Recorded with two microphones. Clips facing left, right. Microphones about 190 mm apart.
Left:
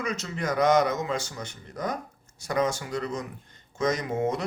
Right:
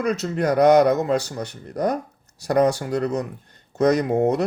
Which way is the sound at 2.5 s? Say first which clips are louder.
Right 8 dB; 65° right (ahead or behind).